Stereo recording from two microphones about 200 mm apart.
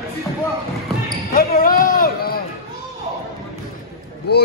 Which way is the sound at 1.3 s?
45° left (ahead or behind).